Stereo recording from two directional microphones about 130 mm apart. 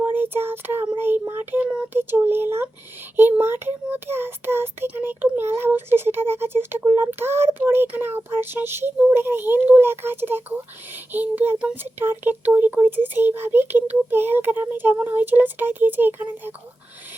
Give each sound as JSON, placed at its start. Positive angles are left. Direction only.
{"t": 0.0, "sound": "child singing", "side_deg": -15}
{"t": 0.9, "sound": "speech", "side_deg": -15}